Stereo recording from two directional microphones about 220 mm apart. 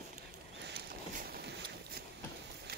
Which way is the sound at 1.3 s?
45° right (ahead or behind).